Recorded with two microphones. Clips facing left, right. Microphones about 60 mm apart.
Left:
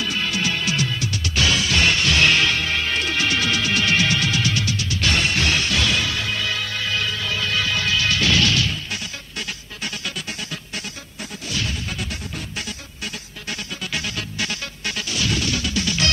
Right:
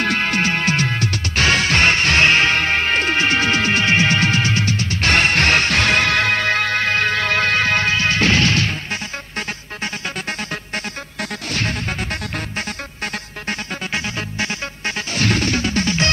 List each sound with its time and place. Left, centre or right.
0.0 s music: right
11.1 s music: right
13.5 s music: right
15.1 s music: right